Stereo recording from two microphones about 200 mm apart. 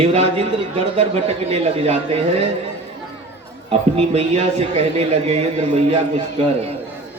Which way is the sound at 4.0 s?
30° right (ahead or behind).